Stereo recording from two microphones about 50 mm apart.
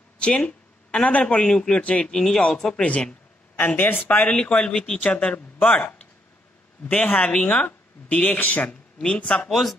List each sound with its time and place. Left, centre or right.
0.2 s speech: left
2.0 s speech: centre
2.7 s speech: left
3.5 s speech: left
4.3 s speech: left
7.2 s speech: left
9.0 s speech: centre
9.5 s speech: centre